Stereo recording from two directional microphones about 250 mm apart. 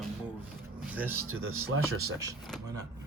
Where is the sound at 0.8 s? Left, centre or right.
Centre.